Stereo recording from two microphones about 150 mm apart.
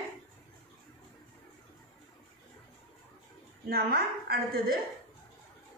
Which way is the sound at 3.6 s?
90° right.